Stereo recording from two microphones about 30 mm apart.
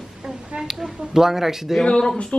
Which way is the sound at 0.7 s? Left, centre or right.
Centre.